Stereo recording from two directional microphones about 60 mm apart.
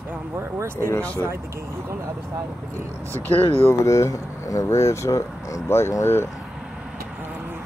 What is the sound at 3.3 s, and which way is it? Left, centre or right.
Speech, left.